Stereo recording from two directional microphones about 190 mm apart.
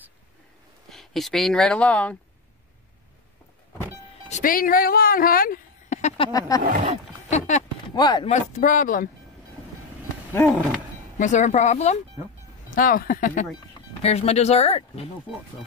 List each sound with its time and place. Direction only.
0.8 s speech: centre (ahead or behind)
4.3 s speech: 45° left (ahead or behind); by 6.6 s 25° left (ahead or behind)
6.6 s speech: 45° right (ahead or behind)
7.2 s a sound: 40° left (ahead or behind)
7.9 s speech: 20° left (ahead or behind)
8.3 s speech: 40° left (ahead or behind)
10.3 s a sound: 10° left (ahead or behind)
11.1 s speech: 40° left (ahead or behind)
12.7 s speech: 45° left (ahead or behind)
14.0 s speech: 35° left (ahead or behind)